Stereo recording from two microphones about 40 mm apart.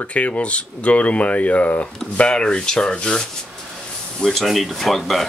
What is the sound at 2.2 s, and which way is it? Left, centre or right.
Rub, left.